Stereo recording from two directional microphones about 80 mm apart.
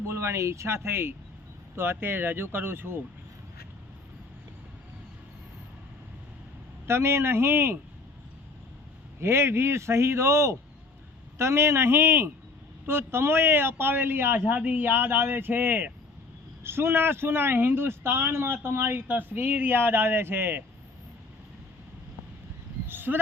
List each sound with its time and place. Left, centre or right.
0.1 s a man's voice: right
6.8 s a man's voice: right
9.2 s a man's voice: right
22.9 s a sound: right